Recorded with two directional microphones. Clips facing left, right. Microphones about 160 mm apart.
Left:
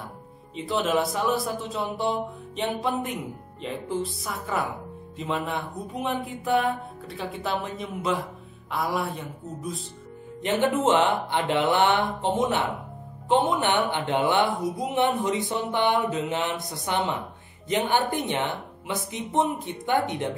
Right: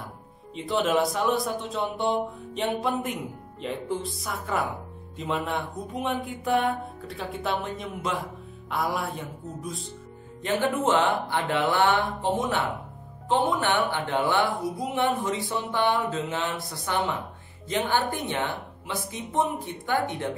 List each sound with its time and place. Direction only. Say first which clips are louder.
0.6 s speech: right 1 dB; centre (ahead or behind)
10.4 s speech: left 2 dB; 20° left (ahead or behind)